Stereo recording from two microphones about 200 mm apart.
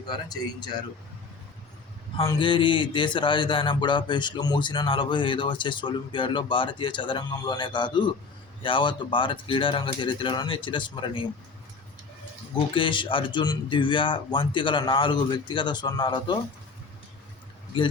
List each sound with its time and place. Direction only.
0.1 s speech: 20° left (ahead or behind)
2.2 s speech: 25° left (ahead or behind)
12.5 s speech: 25° left (ahead or behind)